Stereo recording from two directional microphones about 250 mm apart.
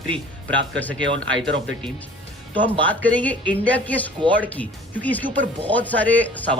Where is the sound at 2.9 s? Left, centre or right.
Centre.